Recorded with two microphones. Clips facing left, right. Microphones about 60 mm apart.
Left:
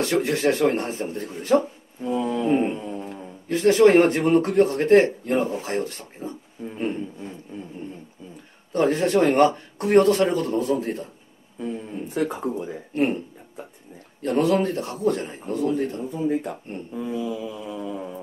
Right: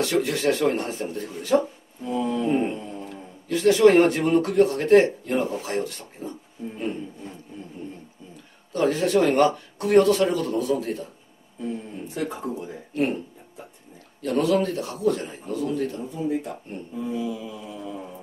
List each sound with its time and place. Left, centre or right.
0.0 s speech: left
6.8 s speech: left
8.7 s speech: left
12.2 s speech: centre
12.5 s speech: left
14.2 s speech: left
15.7 s speech: left
16.1 s speech: left
17.0 s mantra: left